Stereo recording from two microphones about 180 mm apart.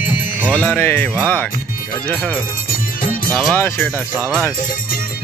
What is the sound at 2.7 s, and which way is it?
Music, 50° left (ahead or behind).